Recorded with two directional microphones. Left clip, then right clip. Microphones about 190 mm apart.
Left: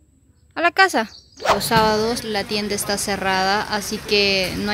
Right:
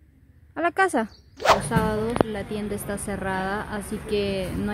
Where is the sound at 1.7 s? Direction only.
20° left (ahead or behind).